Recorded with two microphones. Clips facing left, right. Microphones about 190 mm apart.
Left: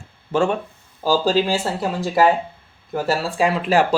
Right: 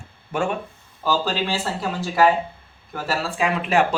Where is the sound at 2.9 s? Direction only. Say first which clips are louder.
Left 5 dB; 35° left (ahead or behind).